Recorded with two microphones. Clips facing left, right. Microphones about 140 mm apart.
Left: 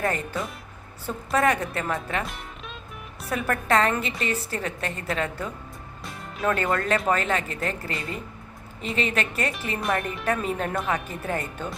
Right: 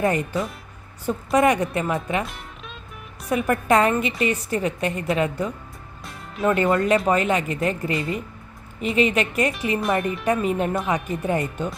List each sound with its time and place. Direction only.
0.0 s a woman's voice: 15° right (ahead or behind)
3.2 s a woman's voice: 15° right (ahead or behind)
9.5 s a woman's voice: centre (ahead or behind)